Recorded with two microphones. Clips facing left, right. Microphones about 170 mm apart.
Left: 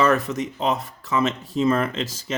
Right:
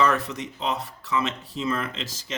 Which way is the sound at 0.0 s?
45° left (ahead or behind).